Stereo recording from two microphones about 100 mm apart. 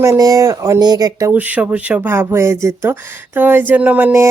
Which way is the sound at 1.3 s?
15° right (ahead or behind).